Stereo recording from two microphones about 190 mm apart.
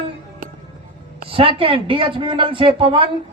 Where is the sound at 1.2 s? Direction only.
30° right (ahead or behind).